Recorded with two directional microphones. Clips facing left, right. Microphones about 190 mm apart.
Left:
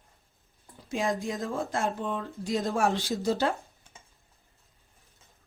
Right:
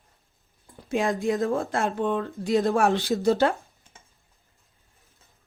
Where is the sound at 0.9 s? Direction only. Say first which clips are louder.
Right 5 dB; 60° right (ahead or behind).